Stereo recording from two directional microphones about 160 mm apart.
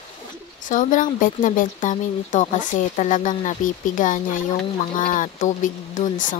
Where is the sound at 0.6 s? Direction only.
55° left (ahead or behind).